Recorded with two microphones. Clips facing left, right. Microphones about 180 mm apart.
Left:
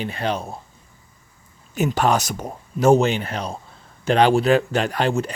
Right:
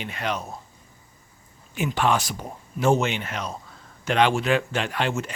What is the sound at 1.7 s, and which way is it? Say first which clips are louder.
Speech: left 4 dB; 40° left (ahead or behind).